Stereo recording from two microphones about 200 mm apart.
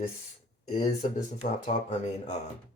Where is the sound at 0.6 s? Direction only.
35° left (ahead or behind).